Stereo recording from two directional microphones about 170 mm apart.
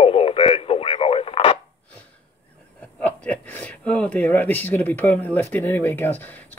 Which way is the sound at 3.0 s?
10° left (ahead or behind).